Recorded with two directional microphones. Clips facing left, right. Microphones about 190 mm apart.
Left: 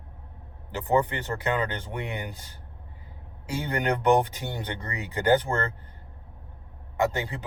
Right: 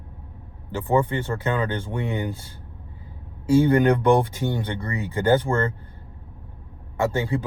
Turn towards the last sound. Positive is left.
turn(degrees=15)  # may be behind; listen again after turning